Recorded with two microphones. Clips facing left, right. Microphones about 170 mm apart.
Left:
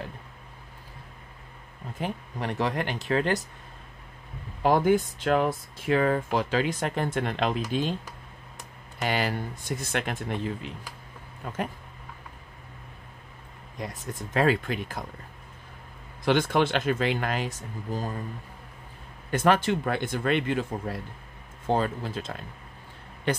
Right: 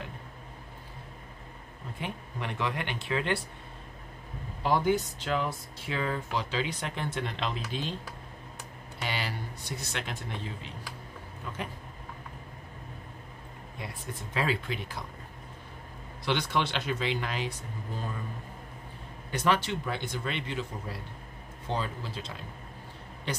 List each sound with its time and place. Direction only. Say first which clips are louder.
2.0 s speech: left 5 dB; 40° left (ahead or behind)
4.6 s speech: left 5 dB; 50° left (ahead or behind)
9.0 s speech: left 7 dB; 50° left (ahead or behind)
13.7 s speech: left 5 dB; 45° left (ahead or behind)
16.3 s speech: left 6 dB; 50° left (ahead or behind)
19.3 s speech: left 5 dB; 50° left (ahead or behind)